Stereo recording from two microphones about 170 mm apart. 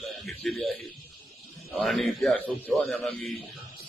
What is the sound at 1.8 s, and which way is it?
A man's voice, centre (ahead or behind).